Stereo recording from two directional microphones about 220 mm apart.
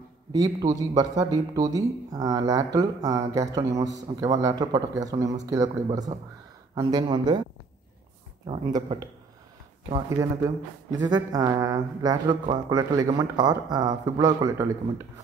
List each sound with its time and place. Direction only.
0.3 s a man's voice: 15° right (ahead or behind)
8.5 s speech: 20° right (ahead or behind)